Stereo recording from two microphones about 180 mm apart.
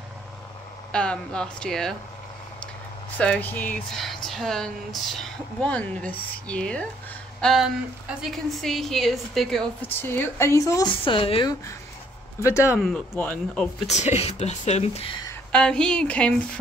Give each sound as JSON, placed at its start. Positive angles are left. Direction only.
{"t": 0.9, "sound": "a woman's voice", "side_deg": 5}
{"t": 3.2, "sound": "a woman's voice", "side_deg": 10}
{"t": 12.4, "sound": "speech", "side_deg": 15}
{"t": 12.7, "sound": "a woman's voice", "side_deg": 0}
{"t": 13.8, "sound": "speech", "side_deg": 40}
{"t": 15.5, "sound": "a woman's voice", "side_deg": 5}